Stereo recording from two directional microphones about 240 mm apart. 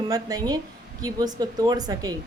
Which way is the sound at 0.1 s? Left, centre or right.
Centre.